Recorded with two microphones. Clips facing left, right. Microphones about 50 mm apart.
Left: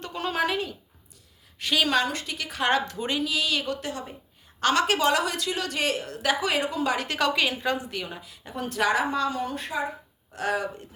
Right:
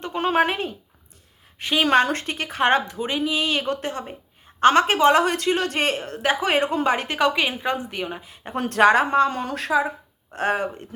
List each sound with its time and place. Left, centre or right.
0.0 s speech: right
1.5 s a woman's voice: right
1.9 s speech: right
2.8 s speech: centre
3.2 s speech: right
7.2 s a woman's voice: right
8.5 s a woman's voice: right
9.4 s speech: right
10.3 s speech: right